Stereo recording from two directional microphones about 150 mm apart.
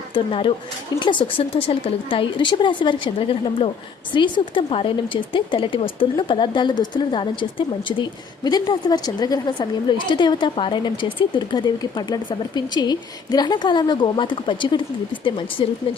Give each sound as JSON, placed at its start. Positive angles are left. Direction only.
{"t": 0.1, "sound": "a woman's voice", "side_deg": 35}
{"t": 8.4, "sound": "a woman's voice", "side_deg": 25}